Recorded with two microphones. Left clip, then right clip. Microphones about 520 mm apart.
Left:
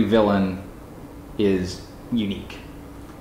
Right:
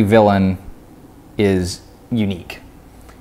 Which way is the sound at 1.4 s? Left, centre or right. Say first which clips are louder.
Right 5 dB; right.